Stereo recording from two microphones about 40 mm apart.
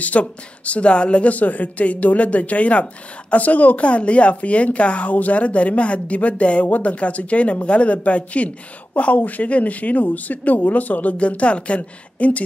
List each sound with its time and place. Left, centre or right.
0.0 s speech: left
11.1 s speech: left